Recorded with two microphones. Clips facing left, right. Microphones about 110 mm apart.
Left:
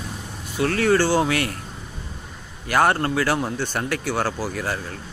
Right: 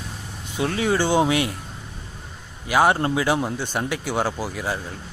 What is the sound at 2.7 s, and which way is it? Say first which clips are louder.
Speech: right 1 dB; 10° right (ahead or behind).